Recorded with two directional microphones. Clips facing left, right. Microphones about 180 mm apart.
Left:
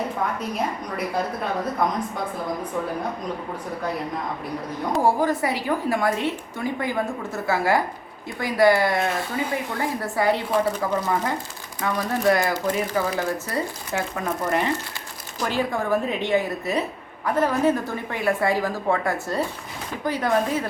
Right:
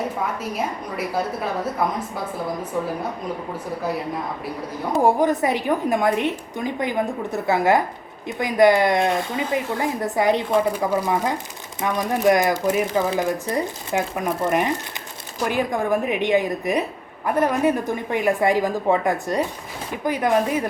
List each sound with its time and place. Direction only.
4.9 s a woman's voice: 20° right (ahead or behind)